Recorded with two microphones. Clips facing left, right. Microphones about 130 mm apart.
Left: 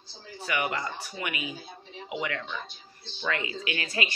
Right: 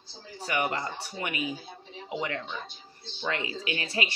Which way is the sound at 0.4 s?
35° right (ahead or behind).